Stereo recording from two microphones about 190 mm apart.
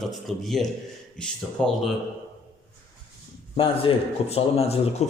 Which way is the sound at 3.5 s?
30° left (ahead or behind).